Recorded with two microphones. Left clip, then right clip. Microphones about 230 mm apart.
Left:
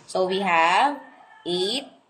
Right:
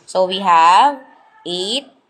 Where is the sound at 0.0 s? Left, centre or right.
Right.